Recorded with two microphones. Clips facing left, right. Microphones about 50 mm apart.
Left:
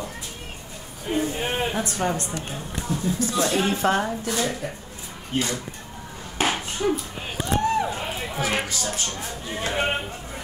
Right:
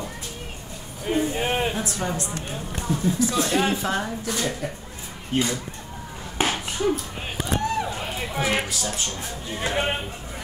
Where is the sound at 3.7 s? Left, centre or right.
Left.